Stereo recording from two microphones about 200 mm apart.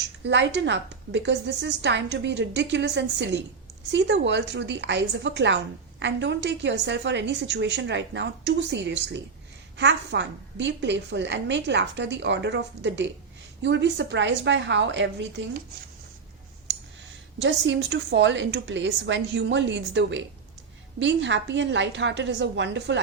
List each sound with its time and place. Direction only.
0.3 s a woman's voice: 60° right (ahead or behind)
17.4 s a woman's voice: 65° right (ahead or behind)